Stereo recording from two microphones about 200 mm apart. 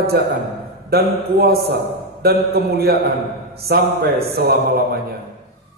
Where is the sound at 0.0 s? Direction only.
50° right (ahead or behind).